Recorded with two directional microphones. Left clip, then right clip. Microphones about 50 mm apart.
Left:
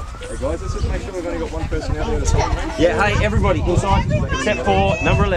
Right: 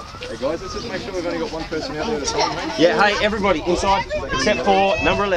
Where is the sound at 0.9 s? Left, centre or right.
Centre.